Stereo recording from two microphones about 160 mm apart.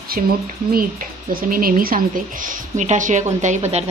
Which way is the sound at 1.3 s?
65° right (ahead or behind).